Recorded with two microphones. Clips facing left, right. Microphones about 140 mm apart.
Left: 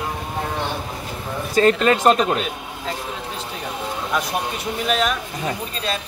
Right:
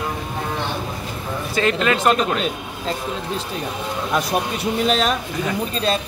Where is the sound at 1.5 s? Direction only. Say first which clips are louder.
Left 4 dB; 40° left (ahead or behind).